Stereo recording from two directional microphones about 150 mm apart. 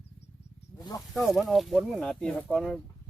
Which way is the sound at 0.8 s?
25° left (ahead or behind).